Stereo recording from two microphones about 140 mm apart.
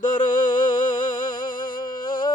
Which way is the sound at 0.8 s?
75° left (ahead or behind).